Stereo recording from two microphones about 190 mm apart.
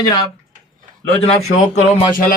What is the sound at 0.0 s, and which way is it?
Speech, 20° left (ahead or behind).